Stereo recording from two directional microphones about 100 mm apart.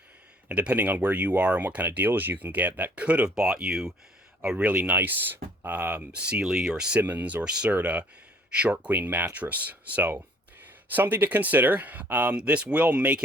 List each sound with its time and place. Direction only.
0.4 s speech: 15° right (ahead or behind)